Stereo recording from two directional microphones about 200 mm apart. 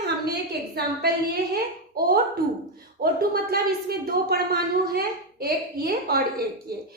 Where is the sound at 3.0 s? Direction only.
50° right (ahead or behind).